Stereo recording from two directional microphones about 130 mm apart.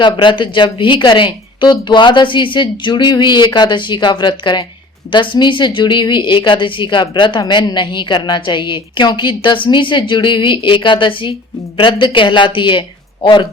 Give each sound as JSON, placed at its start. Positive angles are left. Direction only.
{"t": 0.0, "sound": "a woman's voice", "side_deg": 40}